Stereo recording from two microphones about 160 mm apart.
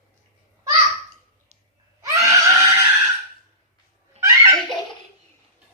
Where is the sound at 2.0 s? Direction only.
20° right (ahead or behind).